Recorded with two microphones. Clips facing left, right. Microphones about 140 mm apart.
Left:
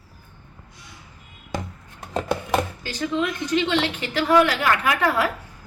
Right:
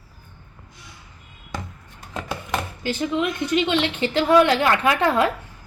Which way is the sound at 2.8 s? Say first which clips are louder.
Right 2 dB; 20° right (ahead or behind).